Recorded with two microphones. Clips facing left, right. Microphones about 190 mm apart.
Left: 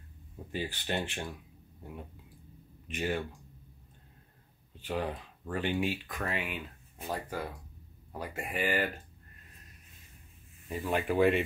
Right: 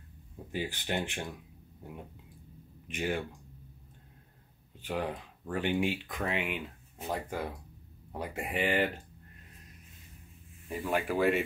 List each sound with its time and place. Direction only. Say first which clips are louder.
0.5 s speech: right 1 dB; 15° right (ahead or behind)
2.9 s speech: even; 10° right (ahead or behind)
4.8 s speech: even; 10° right (ahead or behind)
10.9 s speech: left 2 dB; centre (ahead or behind)